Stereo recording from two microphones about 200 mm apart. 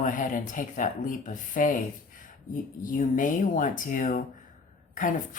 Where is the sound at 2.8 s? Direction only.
40° left (ahead or behind).